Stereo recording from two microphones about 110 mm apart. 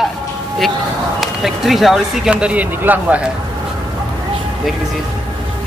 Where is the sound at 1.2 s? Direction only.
Centre (ahead or behind).